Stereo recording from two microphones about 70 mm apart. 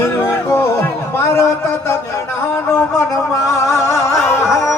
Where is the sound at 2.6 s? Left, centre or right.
Left.